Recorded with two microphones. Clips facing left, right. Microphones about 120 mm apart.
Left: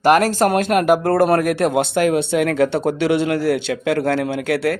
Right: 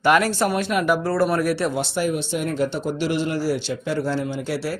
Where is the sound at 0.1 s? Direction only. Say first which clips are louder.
Left 4 dB; 45° left (ahead or behind).